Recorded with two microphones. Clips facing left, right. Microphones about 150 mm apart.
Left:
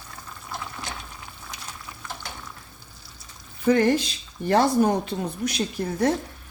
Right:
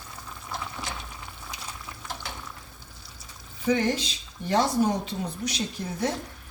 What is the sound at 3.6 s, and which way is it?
A woman's voice, 55° left (ahead or behind).